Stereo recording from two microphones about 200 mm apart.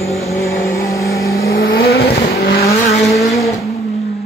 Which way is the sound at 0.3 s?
15° left (ahead or behind).